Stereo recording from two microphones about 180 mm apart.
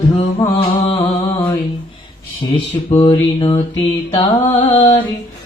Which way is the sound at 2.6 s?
25° left (ahead or behind).